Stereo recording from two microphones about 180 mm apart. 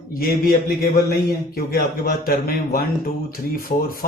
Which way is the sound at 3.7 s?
50° left (ahead or behind).